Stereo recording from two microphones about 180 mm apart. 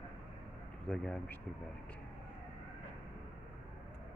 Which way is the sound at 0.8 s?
5° left (ahead or behind).